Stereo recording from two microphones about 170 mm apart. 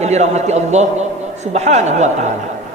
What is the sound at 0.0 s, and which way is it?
A man's voice, 40° right (ahead or behind).